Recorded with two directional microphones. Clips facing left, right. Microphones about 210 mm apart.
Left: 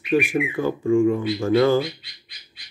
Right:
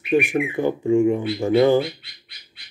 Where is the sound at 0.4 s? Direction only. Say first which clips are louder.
Right 1 dB; 25° right (ahead or behind).